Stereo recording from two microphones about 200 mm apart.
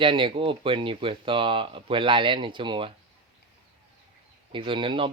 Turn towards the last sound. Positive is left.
turn(degrees=-25)  # may be behind; listen again after turning